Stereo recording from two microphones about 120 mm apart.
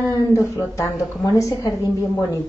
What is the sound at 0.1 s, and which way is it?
Speech, 30° left (ahead or behind).